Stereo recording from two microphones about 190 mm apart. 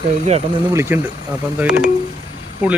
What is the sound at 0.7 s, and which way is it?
Speech, 15° right (ahead or behind).